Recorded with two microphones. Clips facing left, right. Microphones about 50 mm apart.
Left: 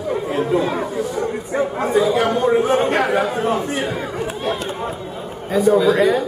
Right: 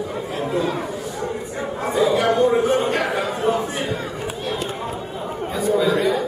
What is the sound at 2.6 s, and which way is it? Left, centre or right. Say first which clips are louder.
Speech: left 2 dB; left.